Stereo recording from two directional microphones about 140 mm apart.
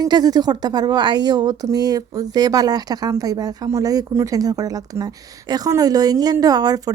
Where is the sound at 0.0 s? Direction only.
30° right (ahead or behind).